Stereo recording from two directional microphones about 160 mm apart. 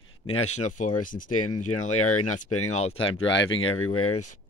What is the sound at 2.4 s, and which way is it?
Speech, 45° left (ahead or behind).